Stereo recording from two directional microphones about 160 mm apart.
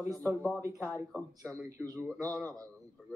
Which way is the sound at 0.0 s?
20° right (ahead or behind).